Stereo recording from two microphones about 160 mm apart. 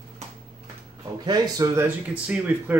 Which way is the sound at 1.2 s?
25° right (ahead or behind).